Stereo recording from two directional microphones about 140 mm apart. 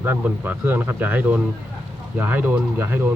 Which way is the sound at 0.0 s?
15° right (ahead or behind).